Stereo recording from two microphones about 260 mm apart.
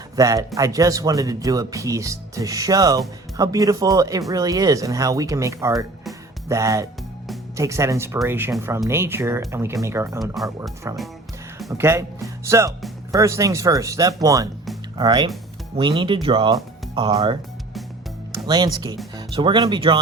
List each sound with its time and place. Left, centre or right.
0.2 s speech: centre
10.2 s speech: centre
10.8 s speech: centre
18.4 s speech: centre